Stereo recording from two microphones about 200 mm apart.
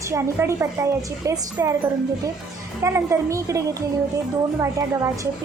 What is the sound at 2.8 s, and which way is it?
A woman's voice, 15° right (ahead or behind).